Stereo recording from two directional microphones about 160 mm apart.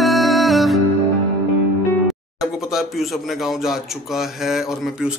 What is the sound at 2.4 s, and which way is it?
Speech, centre (ahead or behind).